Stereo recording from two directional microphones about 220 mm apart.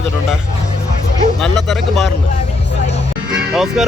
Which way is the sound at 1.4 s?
Centre (ahead or behind).